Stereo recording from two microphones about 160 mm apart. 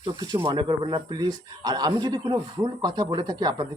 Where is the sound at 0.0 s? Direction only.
25° right (ahead or behind).